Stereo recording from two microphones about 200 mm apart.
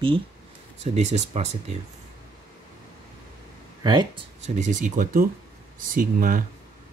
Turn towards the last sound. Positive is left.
turn(degrees=-45)  # may be behind; listen again after turning